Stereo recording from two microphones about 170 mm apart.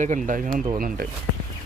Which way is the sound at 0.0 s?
50° right (ahead or behind).